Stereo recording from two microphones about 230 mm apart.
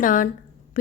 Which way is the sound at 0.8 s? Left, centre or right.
Left.